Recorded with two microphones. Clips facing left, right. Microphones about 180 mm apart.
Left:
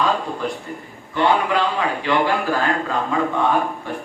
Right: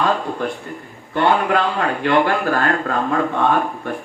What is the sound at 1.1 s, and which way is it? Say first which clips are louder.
A man's voice: right 2 dB; 55° right (ahead or behind).